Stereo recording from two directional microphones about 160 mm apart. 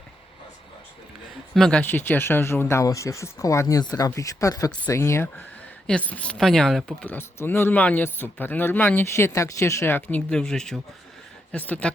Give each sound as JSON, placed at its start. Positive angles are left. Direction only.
{"t": 1.5, "sound": "speech", "side_deg": 5}
{"t": 7.0, "sound": "speech", "side_deg": 15}